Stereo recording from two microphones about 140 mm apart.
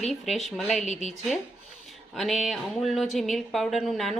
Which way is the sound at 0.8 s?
55° left (ahead or behind).